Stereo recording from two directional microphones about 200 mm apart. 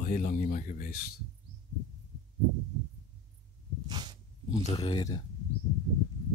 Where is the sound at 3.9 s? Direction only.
20° right (ahead or behind).